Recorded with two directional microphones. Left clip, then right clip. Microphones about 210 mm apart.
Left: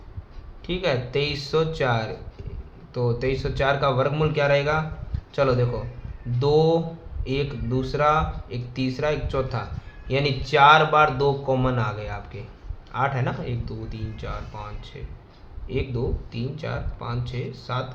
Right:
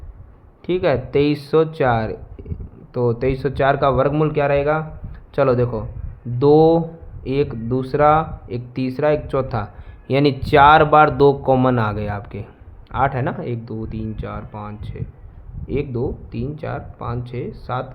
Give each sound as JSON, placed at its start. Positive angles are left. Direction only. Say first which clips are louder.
{"t": 0.6, "sound": "speech", "louder": "right 6 dB", "side_deg": -45}